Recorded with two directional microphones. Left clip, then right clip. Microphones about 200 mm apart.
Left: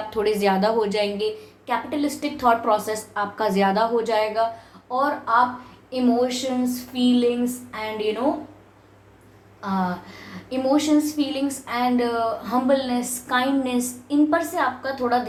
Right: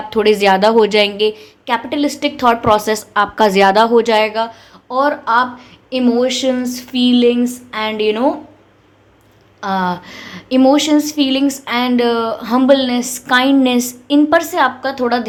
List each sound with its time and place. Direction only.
0.1 s a woman's voice: 35° right (ahead or behind)
9.6 s a woman's voice: 50° right (ahead or behind)